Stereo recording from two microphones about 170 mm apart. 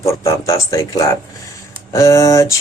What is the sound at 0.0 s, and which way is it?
Speech, 15° left (ahead or behind).